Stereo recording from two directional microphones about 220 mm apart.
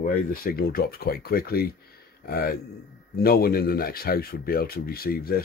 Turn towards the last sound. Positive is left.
turn(degrees=40)  # may be behind; listen again after turning